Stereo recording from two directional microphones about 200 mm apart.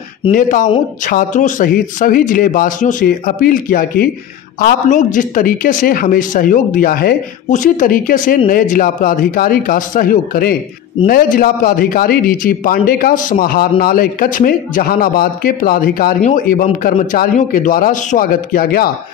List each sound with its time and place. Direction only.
0.3 s a man's voice: 45° left (ahead or behind)